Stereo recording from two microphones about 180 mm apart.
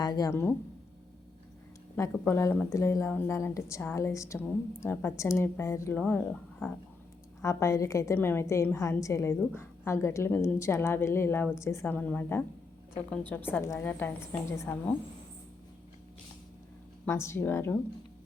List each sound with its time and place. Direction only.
0.0 s speech: 20° left (ahead or behind)
2.0 s a woman's voice: 15° left (ahead or behind)
17.1 s a woman's voice: 15° left (ahead or behind)